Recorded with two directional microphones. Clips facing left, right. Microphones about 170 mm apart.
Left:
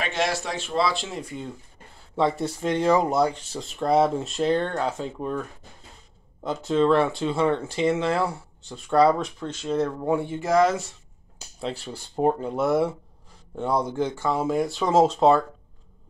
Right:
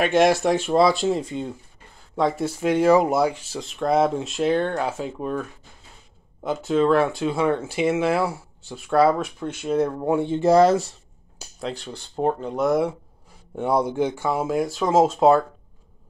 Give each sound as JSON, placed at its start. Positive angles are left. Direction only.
{"t": 0.0, "sound": "speech", "side_deg": -50}
{"t": 2.1, "sound": "speech", "side_deg": 0}
{"t": 11.6, "sound": "speech", "side_deg": 5}
{"t": 13.6, "sound": "speech", "side_deg": -10}